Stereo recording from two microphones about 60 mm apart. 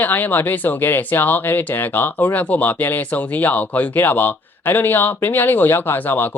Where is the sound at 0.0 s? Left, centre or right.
Left.